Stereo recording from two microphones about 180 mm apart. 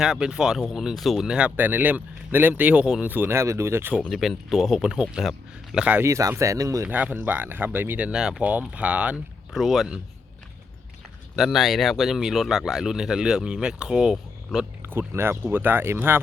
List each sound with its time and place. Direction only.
0.0 s speech: 5° right (ahead or behind)
4.1 s speech: centre (ahead or behind)
11.3 s speech: centre (ahead or behind)